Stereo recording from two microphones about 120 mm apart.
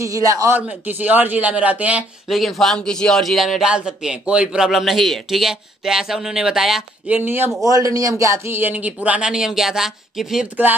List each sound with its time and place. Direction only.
0.0 s a man's voice: 25° right (ahead or behind)
0.6 s speech: 15° right (ahead or behind)
2.2 s a man's voice: centre (ahead or behind)
7.2 s speech: 15° right (ahead or behind)
7.6 s speech: 30° right (ahead or behind); by 10.5 s 5° right (ahead or behind)